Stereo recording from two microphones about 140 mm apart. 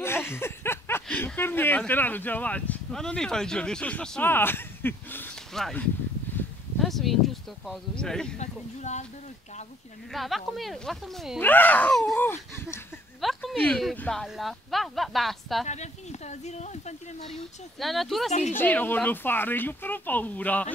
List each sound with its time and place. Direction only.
0.0 s a sound: 15° left (ahead or behind)
1.0 s speech: 10° left (ahead or behind)
5.5 s speech: 5° left (ahead or behind)
8.4 s speech: 55° left (ahead or behind)
10.1 s speech: centre (ahead or behind)
11.3 s speech: 15° left (ahead or behind)
13.2 s speech: centre (ahead or behind)
15.6 s speech: 55° left (ahead or behind)
17.7 s speech: centre (ahead or behind)
18.5 s speech: 15° left (ahead or behind)